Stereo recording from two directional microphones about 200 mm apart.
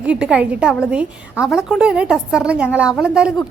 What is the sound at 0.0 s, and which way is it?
A woman's voice, 5° right (ahead or behind).